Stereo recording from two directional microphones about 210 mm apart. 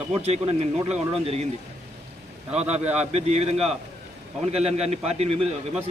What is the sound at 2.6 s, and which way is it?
A man's voice, 30° right (ahead or behind).